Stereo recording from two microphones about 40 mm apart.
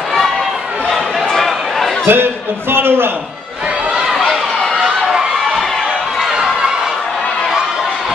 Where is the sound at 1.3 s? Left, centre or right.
Centre.